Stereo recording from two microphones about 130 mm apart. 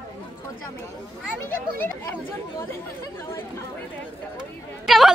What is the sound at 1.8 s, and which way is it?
Speech, 15° left (ahead or behind).